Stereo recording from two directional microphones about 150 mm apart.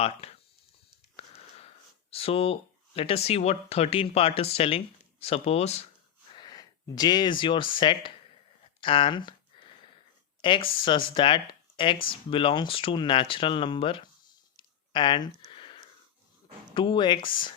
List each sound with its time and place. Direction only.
0.0 s speech: 45° left (ahead or behind)
6.3 s speech: 30° left (ahead or behind)
10.4 s speech: 35° left (ahead or behind)
14.5 s a sound: 30° left (ahead or behind)
16.7 s speech: 35° left (ahead or behind)